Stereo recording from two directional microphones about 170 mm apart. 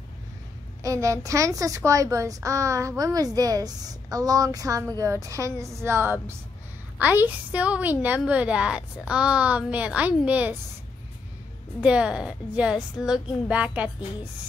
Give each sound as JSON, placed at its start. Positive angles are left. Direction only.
{"t": 0.8, "sound": "a woman's voice", "side_deg": -20}
{"t": 11.8, "sound": "a woman's voice", "side_deg": -5}